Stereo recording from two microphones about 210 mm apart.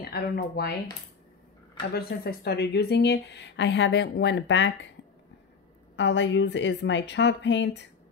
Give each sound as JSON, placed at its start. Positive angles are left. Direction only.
{"t": 0.0, "sound": "speech", "side_deg": 45}
{"t": 1.8, "sound": "speech", "side_deg": 50}
{"t": 5.9, "sound": "a woman's voice", "side_deg": 60}